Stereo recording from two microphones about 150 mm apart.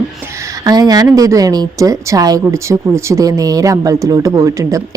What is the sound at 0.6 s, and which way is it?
A woman's voice, 25° right (ahead or behind).